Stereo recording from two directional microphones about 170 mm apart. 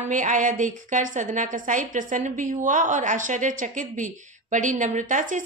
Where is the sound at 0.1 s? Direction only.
50° right (ahead or behind).